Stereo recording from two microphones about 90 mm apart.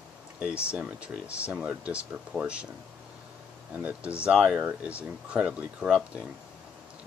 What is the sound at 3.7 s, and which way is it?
Speech, 15° right (ahead or behind).